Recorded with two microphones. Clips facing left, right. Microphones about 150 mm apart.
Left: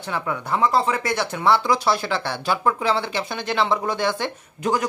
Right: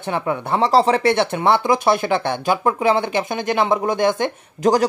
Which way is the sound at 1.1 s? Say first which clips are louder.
Right 6 dB; 25° right (ahead or behind).